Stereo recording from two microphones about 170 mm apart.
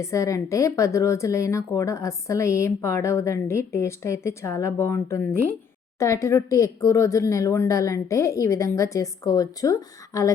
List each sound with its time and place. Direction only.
0.0 s speech: 15° left (ahead or behind)